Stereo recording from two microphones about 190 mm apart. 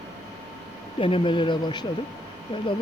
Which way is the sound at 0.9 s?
30° left (ahead or behind).